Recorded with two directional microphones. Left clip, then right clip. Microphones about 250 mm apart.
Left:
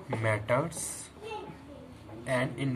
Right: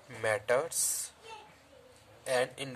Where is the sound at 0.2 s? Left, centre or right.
Right.